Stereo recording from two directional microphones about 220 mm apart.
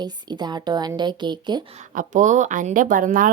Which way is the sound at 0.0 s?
20° right (ahead or behind).